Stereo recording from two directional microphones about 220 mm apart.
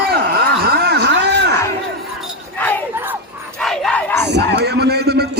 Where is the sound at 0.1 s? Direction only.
45° right (ahead or behind).